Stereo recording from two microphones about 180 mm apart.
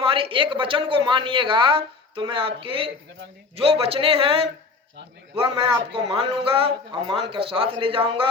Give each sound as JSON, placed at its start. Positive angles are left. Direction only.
{"t": 0.0, "sound": "a man's voice", "side_deg": -30}